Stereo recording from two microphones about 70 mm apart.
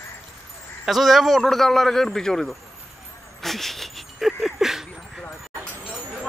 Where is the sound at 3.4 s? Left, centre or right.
Centre.